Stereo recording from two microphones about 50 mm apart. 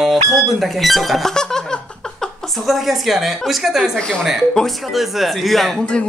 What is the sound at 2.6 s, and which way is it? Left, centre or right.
A woman's voice, centre.